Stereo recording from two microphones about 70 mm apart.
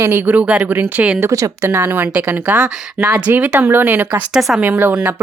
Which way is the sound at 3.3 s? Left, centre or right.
Right.